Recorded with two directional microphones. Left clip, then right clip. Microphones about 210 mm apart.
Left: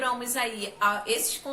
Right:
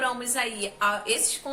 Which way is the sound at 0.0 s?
20° right (ahead or behind).